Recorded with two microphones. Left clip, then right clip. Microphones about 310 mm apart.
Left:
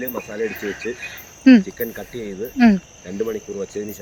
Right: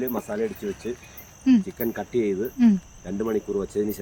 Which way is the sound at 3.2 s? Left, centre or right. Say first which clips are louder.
Right 5 dB; right.